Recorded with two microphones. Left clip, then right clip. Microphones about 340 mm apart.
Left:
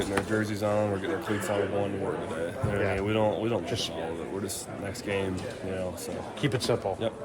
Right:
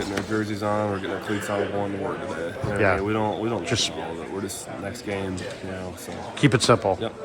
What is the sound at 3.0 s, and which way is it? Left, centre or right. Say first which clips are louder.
Speech: right 2 dB; centre.